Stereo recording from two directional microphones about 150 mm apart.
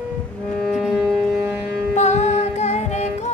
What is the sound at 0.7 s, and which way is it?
Music, 5° left (ahead or behind).